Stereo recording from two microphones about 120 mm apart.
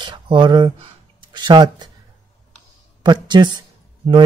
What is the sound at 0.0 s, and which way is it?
Speech, 40° right (ahead or behind).